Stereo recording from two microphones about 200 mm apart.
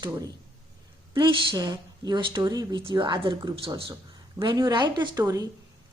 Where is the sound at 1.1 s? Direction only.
25° right (ahead or behind).